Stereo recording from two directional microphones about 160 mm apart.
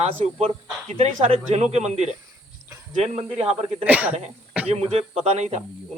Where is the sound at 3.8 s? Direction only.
10° right (ahead or behind).